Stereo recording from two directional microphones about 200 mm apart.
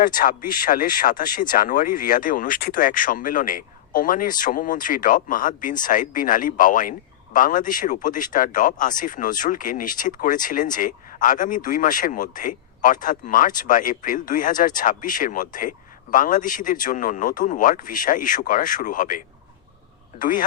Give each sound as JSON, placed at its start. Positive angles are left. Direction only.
{"t": 0.0, "sound": "speech", "side_deg": 45}